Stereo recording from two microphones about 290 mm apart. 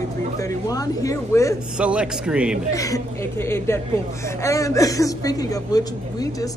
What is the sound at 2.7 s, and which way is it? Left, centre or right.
Speech, centre.